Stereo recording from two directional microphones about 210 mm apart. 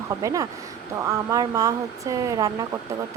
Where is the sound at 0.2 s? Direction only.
15° right (ahead or behind).